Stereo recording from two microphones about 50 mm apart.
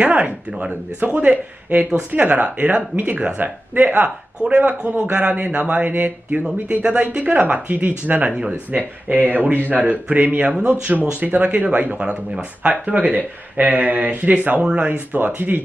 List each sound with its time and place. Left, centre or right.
0.0 s speech: right
3.3 s speech: right
5.9 s speech: right
6.8 s speech: right
11.1 s speech: right
12.0 s speech: centre